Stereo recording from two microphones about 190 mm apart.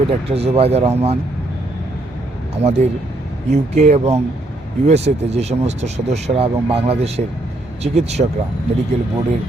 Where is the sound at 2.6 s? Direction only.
35° right (ahead or behind).